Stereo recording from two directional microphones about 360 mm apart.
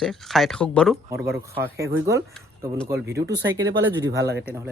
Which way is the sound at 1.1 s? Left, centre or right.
Centre.